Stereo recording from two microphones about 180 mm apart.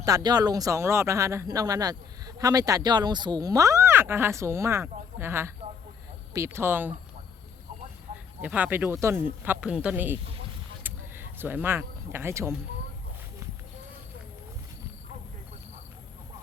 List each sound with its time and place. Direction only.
0.0 s speech: 20° right (ahead or behind)
8.4 s speech: 10° right (ahead or behind)
10.8 s a sound: 10° right (ahead or behind)